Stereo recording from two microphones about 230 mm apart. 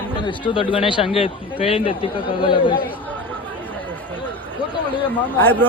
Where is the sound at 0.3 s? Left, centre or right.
Left.